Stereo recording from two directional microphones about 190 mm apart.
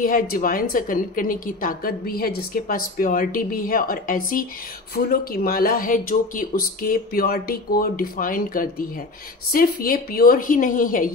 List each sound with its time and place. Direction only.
0.0 s a woman's voice: 45° left (ahead or behind)